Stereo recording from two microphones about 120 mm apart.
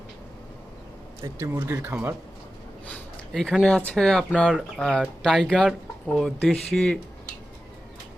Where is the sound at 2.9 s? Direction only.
5° left (ahead or behind).